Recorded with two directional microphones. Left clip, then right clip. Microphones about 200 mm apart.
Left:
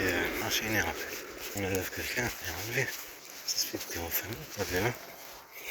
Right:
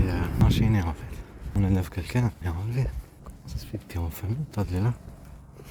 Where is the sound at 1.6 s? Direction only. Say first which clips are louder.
Right 1 dB; 20° right (ahead or behind).